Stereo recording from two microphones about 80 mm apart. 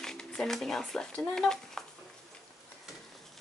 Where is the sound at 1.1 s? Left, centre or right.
Centre.